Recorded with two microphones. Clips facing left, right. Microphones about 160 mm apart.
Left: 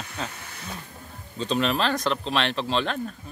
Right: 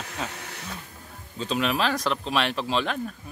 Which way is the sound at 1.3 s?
5° right (ahead or behind).